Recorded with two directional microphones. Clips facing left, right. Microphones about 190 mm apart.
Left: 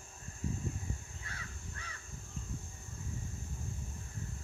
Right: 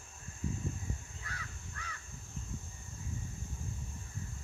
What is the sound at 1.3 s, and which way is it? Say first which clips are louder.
Crow: right 2 dB; 25° left (ahead or behind).